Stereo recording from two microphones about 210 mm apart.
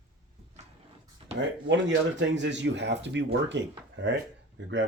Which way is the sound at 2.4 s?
60° right (ahead or behind).